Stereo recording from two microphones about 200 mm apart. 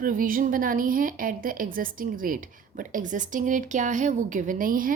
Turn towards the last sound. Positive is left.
turn(degrees=-45)  # may be behind; listen again after turning